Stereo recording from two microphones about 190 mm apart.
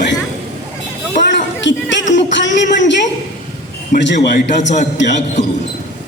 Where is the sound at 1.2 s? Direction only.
70° left (ahead or behind).